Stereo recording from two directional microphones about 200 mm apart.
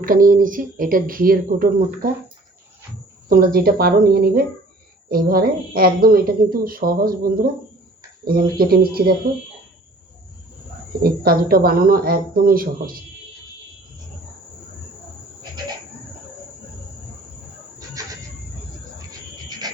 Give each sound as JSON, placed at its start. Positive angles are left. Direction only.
{"t": 0.0, "sound": "a woman's voice", "side_deg": -45}
{"t": 3.2, "sound": "a woman's voice", "side_deg": -45}
{"t": 11.0, "sound": "a woman's voice", "side_deg": -50}
{"t": 18.0, "sound": "insect", "side_deg": -15}
{"t": 19.6, "sound": "a sound", "side_deg": -20}